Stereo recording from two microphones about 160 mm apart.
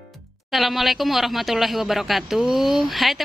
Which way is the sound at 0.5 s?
Centre (ahead or behind).